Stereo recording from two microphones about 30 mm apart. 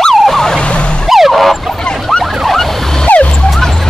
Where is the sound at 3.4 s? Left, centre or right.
Centre.